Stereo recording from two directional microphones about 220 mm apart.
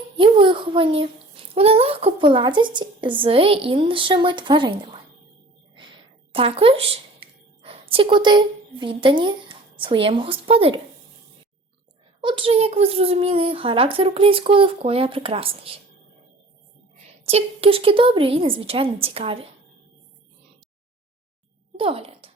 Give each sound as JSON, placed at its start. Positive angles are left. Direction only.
{"t": 0.2, "sound": "a child's voice", "side_deg": -20}
{"t": 6.3, "sound": "a woman's voice", "side_deg": -25}
{"t": 12.2, "sound": "a child's voice", "side_deg": -25}
{"t": 17.2, "sound": "a child's voice", "side_deg": -25}
{"t": 21.8, "sound": "speech", "side_deg": -25}